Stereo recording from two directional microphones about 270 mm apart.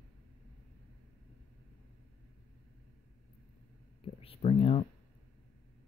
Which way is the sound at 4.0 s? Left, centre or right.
Left.